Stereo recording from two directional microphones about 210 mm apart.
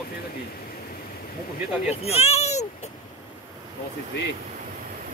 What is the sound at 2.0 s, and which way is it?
Speech, 30° left (ahead or behind).